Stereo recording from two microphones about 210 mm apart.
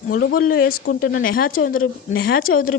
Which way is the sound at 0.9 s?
70° left (ahead or behind).